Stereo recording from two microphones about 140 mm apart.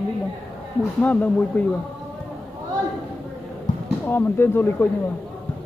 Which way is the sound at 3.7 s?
60° left (ahead or behind).